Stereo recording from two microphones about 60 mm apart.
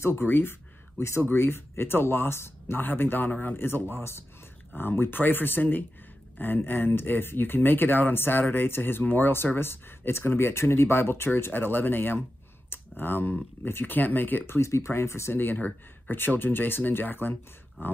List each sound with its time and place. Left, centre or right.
0.0 s speech: left
12.6 s a sound: left
13.7 s speech: left
14.6 s speech: left
15.3 s speech: left